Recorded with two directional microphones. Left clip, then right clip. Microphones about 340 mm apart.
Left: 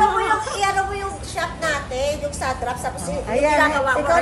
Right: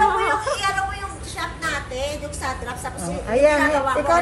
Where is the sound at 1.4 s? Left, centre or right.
Centre.